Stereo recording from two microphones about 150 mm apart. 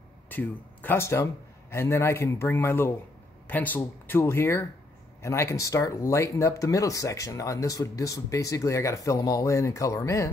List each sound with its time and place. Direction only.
0.3 s a man's voice: 10° left (ahead or behind)